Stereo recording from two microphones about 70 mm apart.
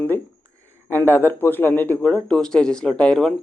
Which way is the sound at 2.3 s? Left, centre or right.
Centre.